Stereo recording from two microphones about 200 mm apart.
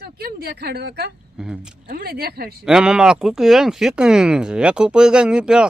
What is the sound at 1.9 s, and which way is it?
Speech, 50° right (ahead or behind).